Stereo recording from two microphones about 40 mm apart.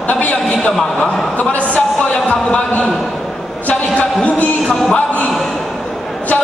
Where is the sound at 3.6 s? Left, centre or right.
Left.